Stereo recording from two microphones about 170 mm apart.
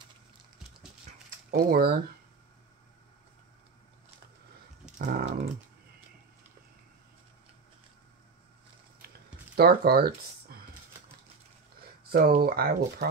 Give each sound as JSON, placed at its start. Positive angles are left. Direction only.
{"t": 1.5, "sound": "speech", "side_deg": -60}
{"t": 4.9, "sound": "speech", "side_deg": -55}
{"t": 9.6, "sound": "speech", "side_deg": -65}
{"t": 12.1, "sound": "speech", "side_deg": -65}